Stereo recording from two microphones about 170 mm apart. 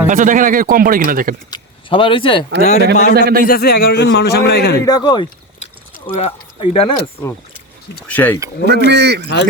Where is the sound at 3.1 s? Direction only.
75° right (ahead or behind).